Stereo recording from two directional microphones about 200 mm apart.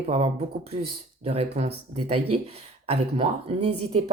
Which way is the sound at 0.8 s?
30° right (ahead or behind).